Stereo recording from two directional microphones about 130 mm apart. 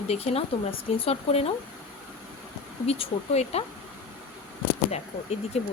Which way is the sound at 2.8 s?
50° left (ahead or behind).